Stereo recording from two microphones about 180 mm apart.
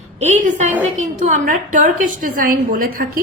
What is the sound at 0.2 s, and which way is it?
A woman's voice, 40° right (ahead or behind).